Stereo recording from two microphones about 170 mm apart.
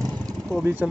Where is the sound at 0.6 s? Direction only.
10° right (ahead or behind).